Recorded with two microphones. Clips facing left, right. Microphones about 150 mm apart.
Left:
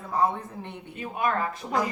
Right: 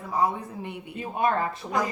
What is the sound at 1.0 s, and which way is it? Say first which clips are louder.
Speech: right 2 dB; 30° right (ahead or behind).